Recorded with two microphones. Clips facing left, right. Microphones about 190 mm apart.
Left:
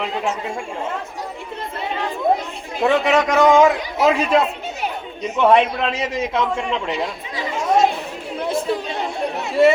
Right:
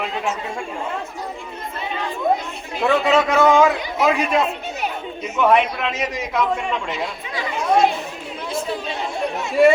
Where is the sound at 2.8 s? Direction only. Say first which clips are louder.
Left 1 dB; 20° left (ahead or behind).